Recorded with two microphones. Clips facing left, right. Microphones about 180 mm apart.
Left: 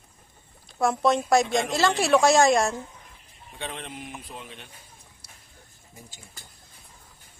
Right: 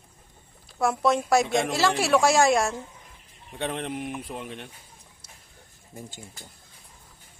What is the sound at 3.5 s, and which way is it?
Speech, 55° right (ahead or behind).